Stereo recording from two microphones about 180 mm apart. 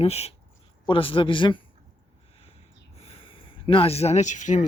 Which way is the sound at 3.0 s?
30° left (ahead or behind).